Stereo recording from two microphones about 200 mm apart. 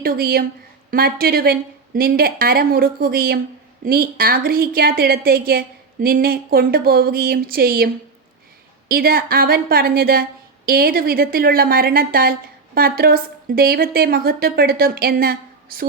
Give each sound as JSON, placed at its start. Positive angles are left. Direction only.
{"t": 0.0, "sound": "a woman's voice", "side_deg": -50}
{"t": 8.9, "sound": "a woman's voice", "side_deg": -50}